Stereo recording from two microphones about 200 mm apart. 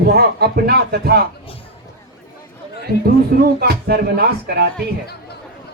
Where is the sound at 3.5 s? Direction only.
50° right (ahead or behind).